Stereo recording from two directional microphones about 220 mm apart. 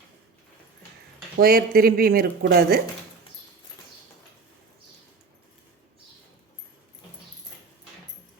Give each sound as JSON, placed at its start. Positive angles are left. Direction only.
{"t": 1.4, "sound": "speech", "side_deg": -40}